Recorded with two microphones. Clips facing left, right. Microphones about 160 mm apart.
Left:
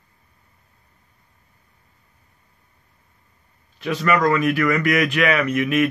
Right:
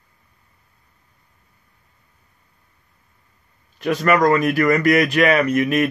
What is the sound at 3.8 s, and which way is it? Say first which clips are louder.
Speech: right 3 dB; 45° right (ahead or behind).